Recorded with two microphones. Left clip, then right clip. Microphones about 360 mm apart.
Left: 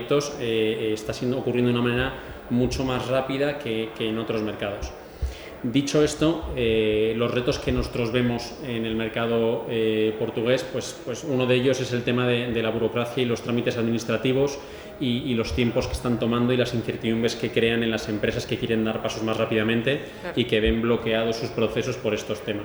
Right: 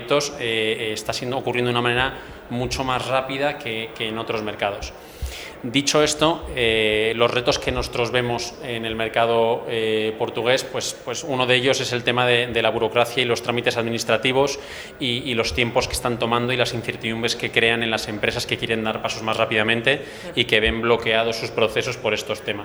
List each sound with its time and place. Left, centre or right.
0.1 s speech: right
5.7 s speech: right